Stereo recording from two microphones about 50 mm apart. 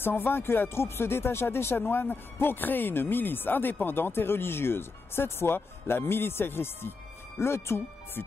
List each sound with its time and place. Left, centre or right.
0.0 s speech: left